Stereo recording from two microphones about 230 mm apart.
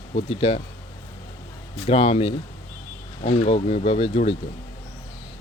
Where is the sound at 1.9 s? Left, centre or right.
Left.